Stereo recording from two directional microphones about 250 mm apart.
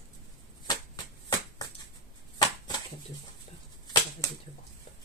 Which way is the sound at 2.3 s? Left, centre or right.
Centre.